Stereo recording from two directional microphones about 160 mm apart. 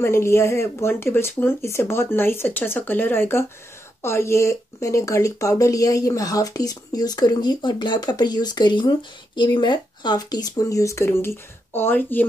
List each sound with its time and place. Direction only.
0.0 s speech: 15° left (ahead or behind)